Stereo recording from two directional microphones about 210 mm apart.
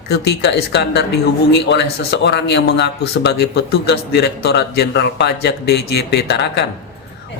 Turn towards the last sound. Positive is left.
turn(degrees=55)  # may be behind; listen again after turning